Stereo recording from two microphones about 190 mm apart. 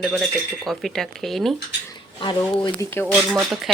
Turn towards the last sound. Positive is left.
turn(degrees=0)  # may be behind; listen again after turning